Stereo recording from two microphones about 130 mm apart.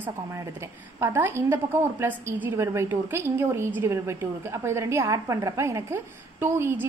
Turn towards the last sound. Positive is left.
turn(degrees=-15)  # may be behind; listen again after turning